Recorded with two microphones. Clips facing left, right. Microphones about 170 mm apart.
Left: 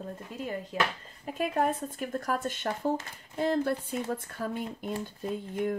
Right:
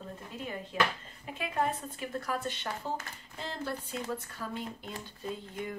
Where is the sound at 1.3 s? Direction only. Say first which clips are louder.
Left 4 dB; 45° left (ahead or behind).